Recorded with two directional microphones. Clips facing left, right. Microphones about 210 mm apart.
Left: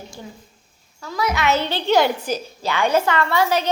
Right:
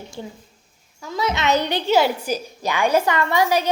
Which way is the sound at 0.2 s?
25° right (ahead or behind).